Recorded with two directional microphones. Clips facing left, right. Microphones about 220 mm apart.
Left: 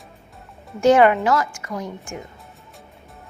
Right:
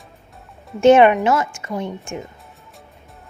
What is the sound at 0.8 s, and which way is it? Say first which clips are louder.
A woman's voice: right 3 dB; 25° right (ahead or behind).